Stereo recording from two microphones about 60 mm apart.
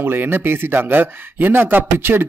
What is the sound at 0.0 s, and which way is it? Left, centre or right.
Speech, right.